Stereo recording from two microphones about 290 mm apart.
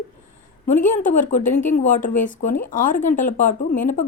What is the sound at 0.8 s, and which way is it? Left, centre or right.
A woman's voice, left.